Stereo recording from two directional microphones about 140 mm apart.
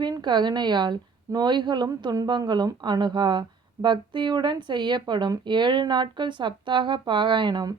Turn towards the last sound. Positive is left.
turn(degrees=-30)  # may be behind; listen again after turning